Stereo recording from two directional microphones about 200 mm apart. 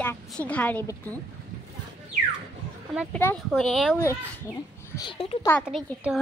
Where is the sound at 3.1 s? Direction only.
5° left (ahead or behind).